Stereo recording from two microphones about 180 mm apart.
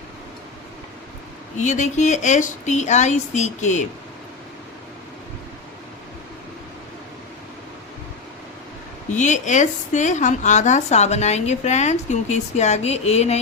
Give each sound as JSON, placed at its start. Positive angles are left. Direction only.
{"t": 1.5, "sound": "a woman's voice", "side_deg": 45}
{"t": 9.0, "sound": "a woman's voice", "side_deg": 40}